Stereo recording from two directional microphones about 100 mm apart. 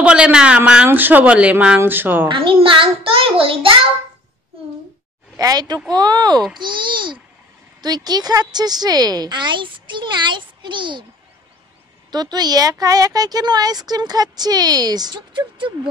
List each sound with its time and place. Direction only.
0.0 s speech: 10° right (ahead or behind)
2.2 s a child's voice: 60° right (ahead or behind)
5.4 s a woman's voice: 40° right (ahead or behind)
12.1 s speech: 45° right (ahead or behind)